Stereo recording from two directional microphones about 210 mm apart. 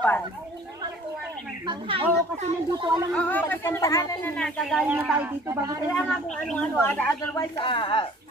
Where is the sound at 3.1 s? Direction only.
10° left (ahead or behind).